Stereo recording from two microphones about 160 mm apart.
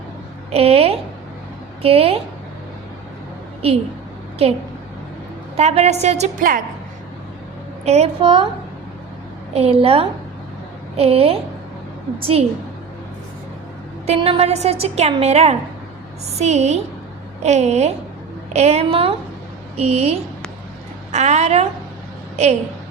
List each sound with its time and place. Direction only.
0.5 s a woman's voice: 40° right (ahead or behind)
4.4 s a woman's voice: 40° right (ahead or behind)
7.9 s a woman's voice: 40° right (ahead or behind)
9.6 s a woman's voice: 40° right (ahead or behind)
14.1 s a woman's voice: 40° right (ahead or behind)